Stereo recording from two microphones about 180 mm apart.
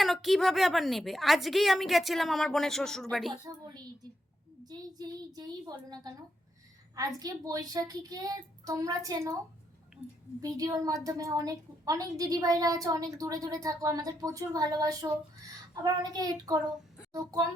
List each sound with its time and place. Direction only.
0.0 s a woman's voice: centre (ahead or behind)
4.6 s a woman's voice: 20° right (ahead or behind)
10.4 s a woman's voice: 20° right (ahead or behind)